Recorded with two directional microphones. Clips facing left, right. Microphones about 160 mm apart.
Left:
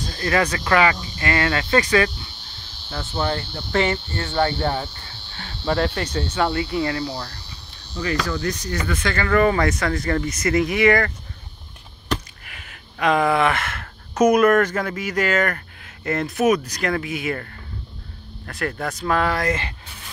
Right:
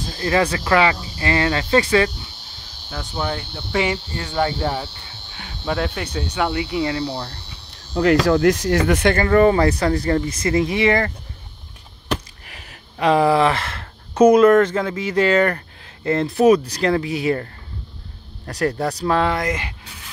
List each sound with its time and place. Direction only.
0.0 s speech: 25° right (ahead or behind)
2.9 s speech: 10° right (ahead or behind)
5.0 s cricket: 15° right (ahead or behind)
5.9 s speech: 10° right (ahead or behind); by 7.4 s 25° right (ahead or behind)
7.9 s speech: 60° right (ahead or behind); by 8.9 s 90° right
9.3 s speech: 30° right (ahead or behind)
12.4 s a sound: 35° right (ahead or behind)
13.0 s speech: 30° right (ahead or behind); by 19.7 s 15° right (ahead or behind)